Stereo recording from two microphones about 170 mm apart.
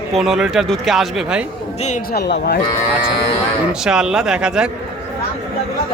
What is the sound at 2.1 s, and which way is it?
Speech, 80° left.